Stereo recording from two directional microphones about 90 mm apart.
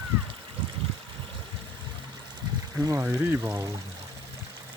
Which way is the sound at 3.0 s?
25° right (ahead or behind).